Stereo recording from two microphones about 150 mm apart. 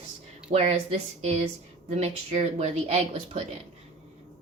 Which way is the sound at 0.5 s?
45° right (ahead or behind).